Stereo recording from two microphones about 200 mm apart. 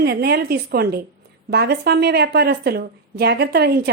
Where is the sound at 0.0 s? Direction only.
55° right (ahead or behind).